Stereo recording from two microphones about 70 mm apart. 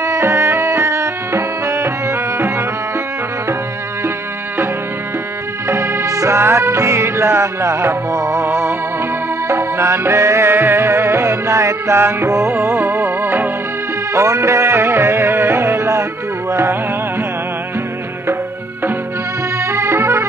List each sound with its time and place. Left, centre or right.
0.0 s music: right
5.7 s music: right
14.1 s music: right
19.6 s music: right